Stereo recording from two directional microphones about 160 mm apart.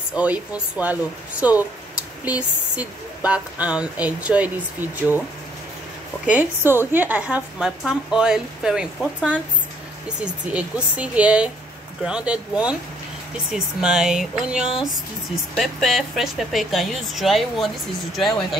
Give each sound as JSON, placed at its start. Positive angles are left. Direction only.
{"t": 0.1, "sound": "speech", "side_deg": -10}
{"t": 6.2, "sound": "speech", "side_deg": -10}